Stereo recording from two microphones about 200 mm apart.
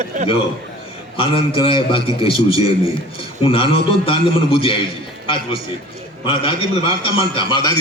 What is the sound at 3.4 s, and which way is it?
A man's voice, 25° left (ahead or behind).